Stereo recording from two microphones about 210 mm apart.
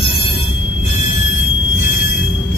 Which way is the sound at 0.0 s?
25° left (ahead or behind).